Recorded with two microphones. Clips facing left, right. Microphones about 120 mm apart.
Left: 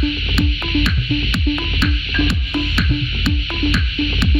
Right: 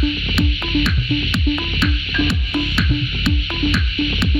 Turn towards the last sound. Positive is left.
turn(degrees=0)  # may be behind; listen again after turning